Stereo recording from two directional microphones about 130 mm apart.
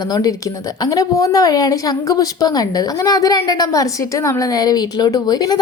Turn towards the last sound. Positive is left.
turn(degrees=30)  # may be behind; listen again after turning